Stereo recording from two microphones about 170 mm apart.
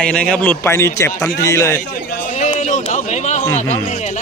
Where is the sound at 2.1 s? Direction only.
55° left (ahead or behind).